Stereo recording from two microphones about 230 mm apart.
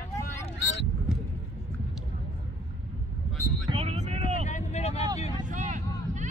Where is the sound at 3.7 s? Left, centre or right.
Right.